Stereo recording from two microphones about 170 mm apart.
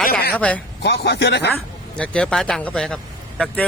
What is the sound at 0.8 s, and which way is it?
Speech, 75° left (ahead or behind).